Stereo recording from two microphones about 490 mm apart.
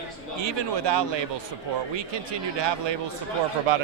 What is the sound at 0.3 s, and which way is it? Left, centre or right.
Speech, right.